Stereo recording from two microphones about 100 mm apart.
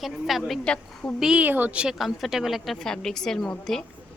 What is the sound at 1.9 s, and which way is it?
Speech, centre (ahead or behind).